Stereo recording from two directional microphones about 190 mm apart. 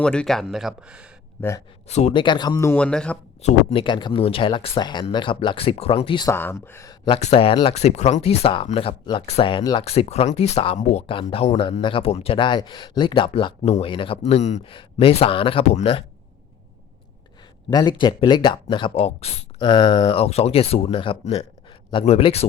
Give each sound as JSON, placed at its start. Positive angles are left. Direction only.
{"t": 0.0, "sound": "speech", "side_deg": 5}
{"t": 1.4, "sound": "speech", "side_deg": 15}
{"t": 1.9, "sound": "speech", "side_deg": 35}
{"t": 3.4, "sound": "speech", "side_deg": 30}
{"t": 6.3, "sound": "speech", "side_deg": 10}
{"t": 7.2, "sound": "speech", "side_deg": 35}
{"t": 17.7, "sound": "speech", "side_deg": 25}